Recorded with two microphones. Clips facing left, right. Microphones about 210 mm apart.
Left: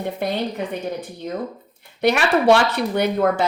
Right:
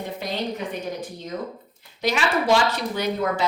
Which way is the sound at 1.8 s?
60° left (ahead or behind).